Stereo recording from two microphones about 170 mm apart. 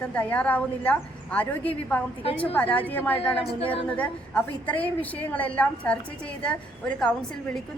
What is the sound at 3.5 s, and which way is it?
Speech, 35° left (ahead or behind).